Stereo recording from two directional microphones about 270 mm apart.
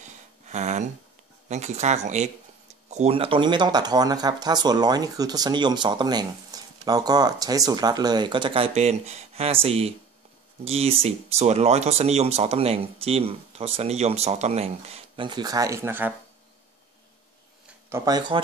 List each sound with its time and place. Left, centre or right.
0.0 s a sound: right
1.5 s speech: right; by 16.1 s centre
17.6 s speech: centre